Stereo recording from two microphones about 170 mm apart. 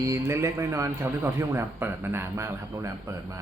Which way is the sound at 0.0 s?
15° right (ahead or behind).